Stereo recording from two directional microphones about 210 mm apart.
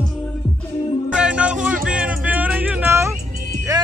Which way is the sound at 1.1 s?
5° right (ahead or behind).